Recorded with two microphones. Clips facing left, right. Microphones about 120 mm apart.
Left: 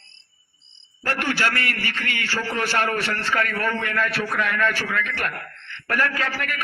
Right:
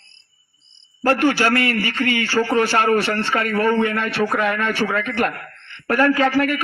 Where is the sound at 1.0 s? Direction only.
35° right (ahead or behind).